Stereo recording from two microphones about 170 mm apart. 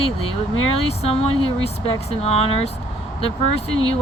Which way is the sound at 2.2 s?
35° left (ahead or behind).